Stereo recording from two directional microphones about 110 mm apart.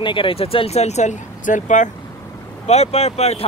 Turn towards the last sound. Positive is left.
turn(degrees=70)  # may be behind; listen again after turning